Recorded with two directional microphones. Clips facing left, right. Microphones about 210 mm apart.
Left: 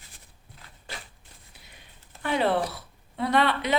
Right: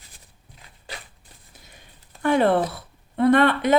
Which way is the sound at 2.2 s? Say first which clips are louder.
Right 6 dB; 50° right (ahead or behind).